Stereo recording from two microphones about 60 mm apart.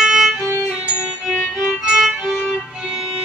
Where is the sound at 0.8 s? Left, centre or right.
Centre.